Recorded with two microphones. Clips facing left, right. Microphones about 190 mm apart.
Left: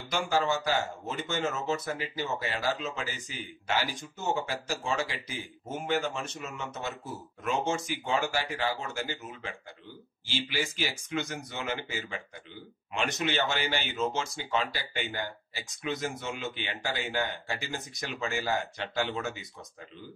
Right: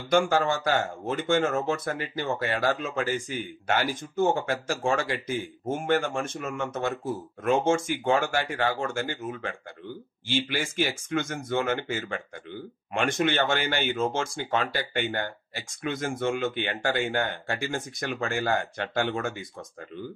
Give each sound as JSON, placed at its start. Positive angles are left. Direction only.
{"t": 0.1, "sound": "speech", "side_deg": -55}